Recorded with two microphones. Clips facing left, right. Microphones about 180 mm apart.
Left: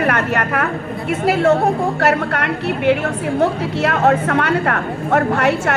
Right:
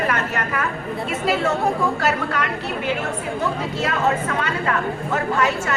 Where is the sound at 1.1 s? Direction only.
60° left (ahead or behind).